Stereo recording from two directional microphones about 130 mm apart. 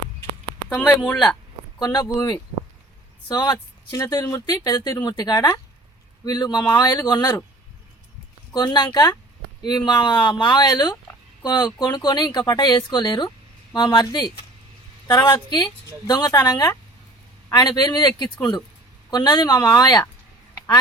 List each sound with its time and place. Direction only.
0.7 s speech: 10° left (ahead or behind)
1.8 s speech: 30° left (ahead or behind)
8.5 s speech: 35° left (ahead or behind)
19.1 s speech: 35° left (ahead or behind)